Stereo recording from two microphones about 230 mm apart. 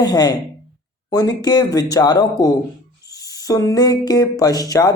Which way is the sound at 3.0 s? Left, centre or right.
Centre.